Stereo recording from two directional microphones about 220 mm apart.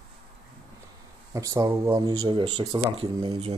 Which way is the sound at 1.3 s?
15° right (ahead or behind).